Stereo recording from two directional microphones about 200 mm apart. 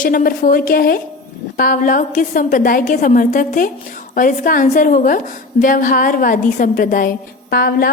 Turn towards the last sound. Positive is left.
turn(degrees=50)  # may be behind; listen again after turning